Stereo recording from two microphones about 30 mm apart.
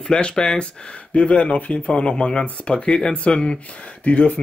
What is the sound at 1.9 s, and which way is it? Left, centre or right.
Speech, left.